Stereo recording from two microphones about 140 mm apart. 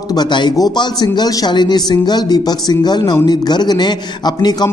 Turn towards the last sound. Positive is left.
turn(degrees=30)  # may be behind; listen again after turning